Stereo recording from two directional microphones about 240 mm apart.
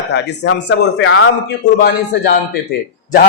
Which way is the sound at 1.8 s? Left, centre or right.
Left.